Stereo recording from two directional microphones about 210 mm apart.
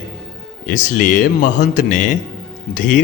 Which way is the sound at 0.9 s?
40° left (ahead or behind).